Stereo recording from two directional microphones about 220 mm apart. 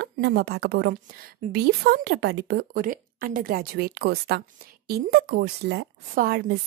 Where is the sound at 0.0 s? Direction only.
50° right (ahead or behind).